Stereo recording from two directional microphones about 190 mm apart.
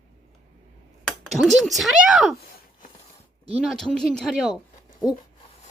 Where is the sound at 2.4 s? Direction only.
50° left (ahead or behind).